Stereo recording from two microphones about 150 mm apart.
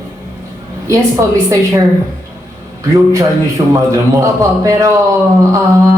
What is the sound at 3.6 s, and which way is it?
Speech, 35° right (ahead or behind).